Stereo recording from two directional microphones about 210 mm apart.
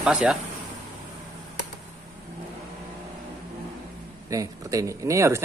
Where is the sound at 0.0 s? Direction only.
5° right (ahead or behind).